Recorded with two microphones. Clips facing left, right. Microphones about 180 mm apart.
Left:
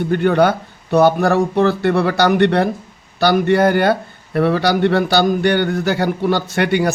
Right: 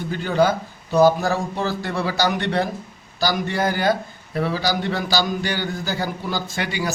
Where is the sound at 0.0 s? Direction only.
60° left (ahead or behind).